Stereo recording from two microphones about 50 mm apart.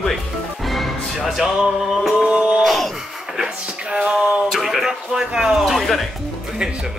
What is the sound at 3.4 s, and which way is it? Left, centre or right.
Music, centre.